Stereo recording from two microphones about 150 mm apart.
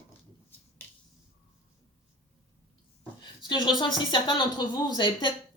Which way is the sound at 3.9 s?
30° left (ahead or behind).